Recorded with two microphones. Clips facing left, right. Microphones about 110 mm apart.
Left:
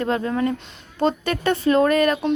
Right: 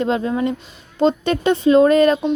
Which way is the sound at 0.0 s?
20° right (ahead or behind).